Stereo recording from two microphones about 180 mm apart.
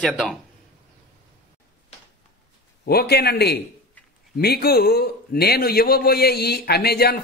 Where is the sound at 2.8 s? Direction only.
60° left (ahead or behind).